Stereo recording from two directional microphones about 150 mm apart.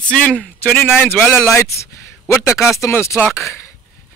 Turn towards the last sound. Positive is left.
turn(degrees=20)  # may be behind; listen again after turning